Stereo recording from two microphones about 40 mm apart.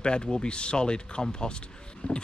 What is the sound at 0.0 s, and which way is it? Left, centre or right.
Speech, left.